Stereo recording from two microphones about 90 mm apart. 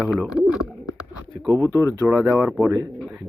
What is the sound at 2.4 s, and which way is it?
Speech, 30° right (ahead or behind).